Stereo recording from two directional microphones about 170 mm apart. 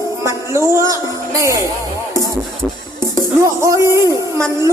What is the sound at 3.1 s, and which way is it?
Music, 20° right (ahead or behind).